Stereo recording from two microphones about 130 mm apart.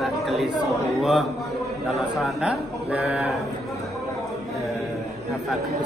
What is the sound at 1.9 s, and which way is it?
A man's voice, centre (ahead or behind).